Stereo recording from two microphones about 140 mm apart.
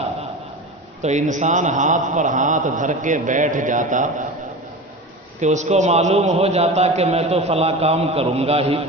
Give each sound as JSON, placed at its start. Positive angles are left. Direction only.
{"t": 1.0, "sound": "a man's voice", "side_deg": -60}
{"t": 5.4, "sound": "a man's voice", "side_deg": -55}